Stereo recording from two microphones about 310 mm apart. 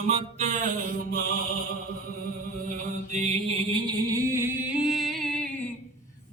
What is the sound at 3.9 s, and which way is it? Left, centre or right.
Music, centre.